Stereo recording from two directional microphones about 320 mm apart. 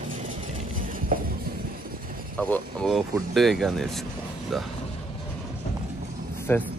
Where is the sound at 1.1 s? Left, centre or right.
Right.